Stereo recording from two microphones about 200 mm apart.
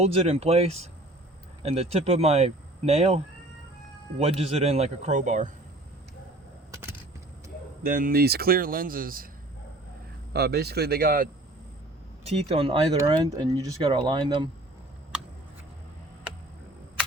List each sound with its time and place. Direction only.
0.0 s speech: 30° right (ahead or behind)
4.2 s speech: 30° right (ahead or behind)
7.9 s speech: 45° right (ahead or behind)
10.3 s speech: 55° right (ahead or behind)
12.2 s speech: 30° right (ahead or behind)